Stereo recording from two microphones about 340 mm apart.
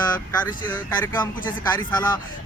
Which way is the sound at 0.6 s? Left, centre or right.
Centre.